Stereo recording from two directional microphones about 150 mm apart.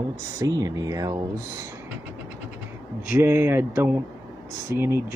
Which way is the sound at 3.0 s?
15° right (ahead or behind).